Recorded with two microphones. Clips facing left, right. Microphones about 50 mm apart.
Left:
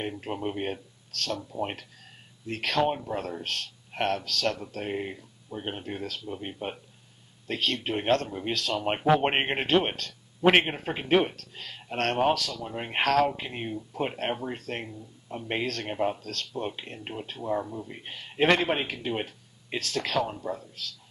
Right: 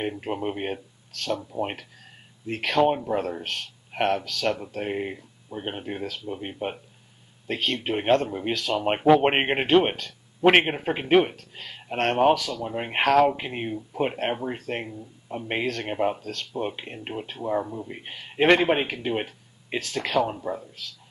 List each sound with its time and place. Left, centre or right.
0.0 s speech: centre